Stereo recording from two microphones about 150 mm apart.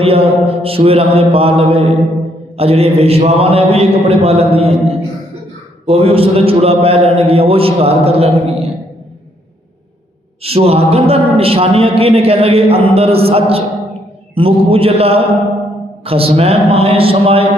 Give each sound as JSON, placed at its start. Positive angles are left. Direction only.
{"t": 0.0, "sound": "a man's voice", "side_deg": -40}
{"t": 10.4, "sound": "a man's voice", "side_deg": -40}